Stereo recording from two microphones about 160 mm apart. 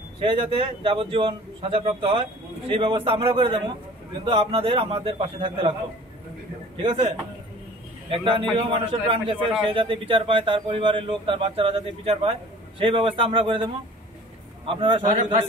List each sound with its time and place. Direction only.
0.2 s speech: 30° right (ahead or behind)
6.8 s speech: 35° right (ahead or behind)
8.1 s speech: 30° right (ahead or behind)
14.7 s speech: 30° right (ahead or behind)